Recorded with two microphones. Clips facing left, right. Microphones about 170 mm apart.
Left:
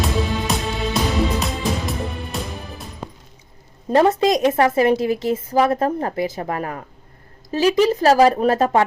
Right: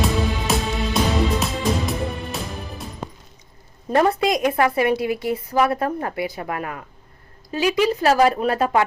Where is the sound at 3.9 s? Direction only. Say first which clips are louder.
Left 3 dB; 25° left (ahead or behind).